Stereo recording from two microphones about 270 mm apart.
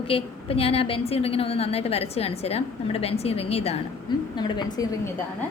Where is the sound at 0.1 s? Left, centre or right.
Left.